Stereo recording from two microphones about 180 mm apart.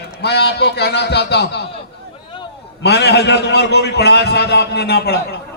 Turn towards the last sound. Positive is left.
turn(degrees=60)  # may be behind; listen again after turning